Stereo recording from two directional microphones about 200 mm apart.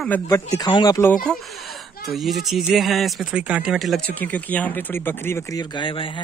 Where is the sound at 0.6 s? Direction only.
20° left (ahead or behind).